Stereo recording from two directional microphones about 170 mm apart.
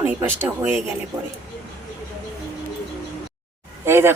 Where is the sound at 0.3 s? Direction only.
10° right (ahead or behind).